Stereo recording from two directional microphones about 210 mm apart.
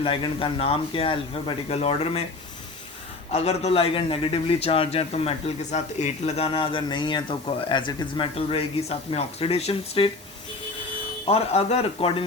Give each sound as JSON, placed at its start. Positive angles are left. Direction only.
{"t": 0.0, "sound": "a man's voice", "side_deg": 25}
{"t": 3.3, "sound": "a man's voice", "side_deg": 30}
{"t": 11.3, "sound": "a man's voice", "side_deg": 30}